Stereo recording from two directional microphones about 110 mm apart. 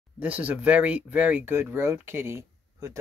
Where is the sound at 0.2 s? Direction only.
15° right (ahead or behind).